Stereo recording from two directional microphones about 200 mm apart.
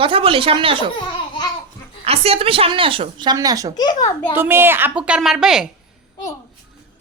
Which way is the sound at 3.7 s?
20° left (ahead or behind).